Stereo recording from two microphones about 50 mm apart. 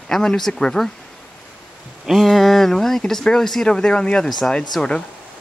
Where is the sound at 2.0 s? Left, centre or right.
Centre.